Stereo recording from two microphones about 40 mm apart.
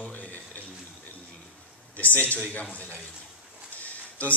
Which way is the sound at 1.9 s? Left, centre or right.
Left.